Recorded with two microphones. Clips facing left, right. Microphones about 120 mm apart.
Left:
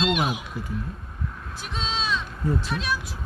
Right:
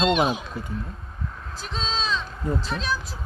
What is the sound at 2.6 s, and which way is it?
Speech, 10° left (ahead or behind).